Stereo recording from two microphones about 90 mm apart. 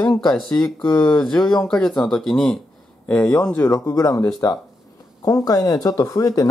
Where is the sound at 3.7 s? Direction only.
45° left (ahead or behind).